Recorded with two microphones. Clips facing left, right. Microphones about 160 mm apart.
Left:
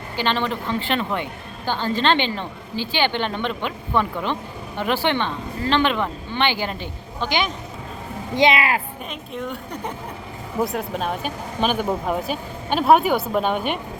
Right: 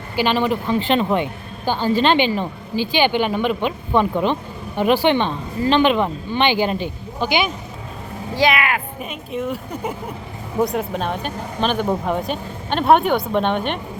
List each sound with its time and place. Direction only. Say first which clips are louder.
0.2 s speech: right 5 dB; 10° right (ahead or behind)
3.7 s speech: right 4 dB; 20° right (ahead or behind)
8.4 s speech: even; 25° left (ahead or behind)
9.0 s speech: right 5 dB; 5° right (ahead or behind)